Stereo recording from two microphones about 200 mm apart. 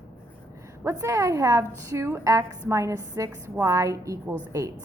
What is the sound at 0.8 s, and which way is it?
A woman's voice, 15° right (ahead or behind).